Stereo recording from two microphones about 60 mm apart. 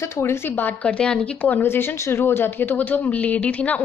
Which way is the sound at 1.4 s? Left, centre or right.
Left.